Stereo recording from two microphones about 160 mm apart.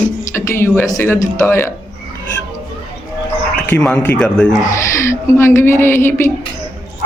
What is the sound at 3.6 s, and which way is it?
Speech, 10° left (ahead or behind).